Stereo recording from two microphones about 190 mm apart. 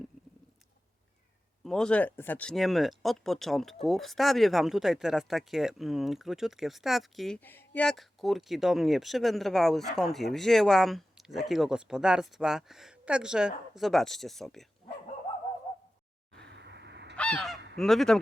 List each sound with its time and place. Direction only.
1.6 s speech: 5° left (ahead or behind)
16.3 s a sound: 65° right (ahead or behind)
17.2 s honk: 5° left (ahead or behind)
17.7 s speech: centre (ahead or behind)